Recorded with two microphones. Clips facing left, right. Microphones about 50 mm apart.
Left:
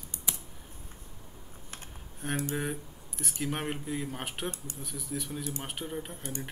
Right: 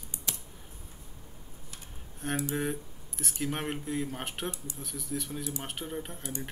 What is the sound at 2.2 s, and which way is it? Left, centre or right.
Speech, centre.